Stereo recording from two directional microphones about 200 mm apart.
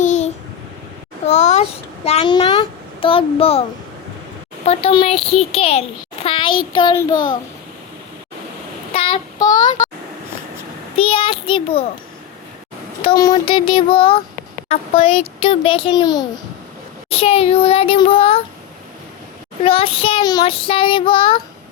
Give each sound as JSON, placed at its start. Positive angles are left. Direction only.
{"t": 0.0, "sound": "a sound", "side_deg": 35}
{"t": 1.3, "sound": "a sound", "side_deg": 35}
{"t": 2.0, "sound": "a child's voice", "side_deg": 25}
{"t": 4.6, "sound": "child singing", "side_deg": 30}
{"t": 8.9, "sound": "child singing", "side_deg": 30}
{"t": 10.9, "sound": "child singing", "side_deg": 25}
{"t": 13.0, "sound": "child singing", "side_deg": 25}
{"t": 19.6, "sound": "child singing", "side_deg": 30}